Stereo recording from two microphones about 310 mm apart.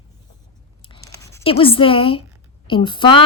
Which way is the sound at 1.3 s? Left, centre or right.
Centre.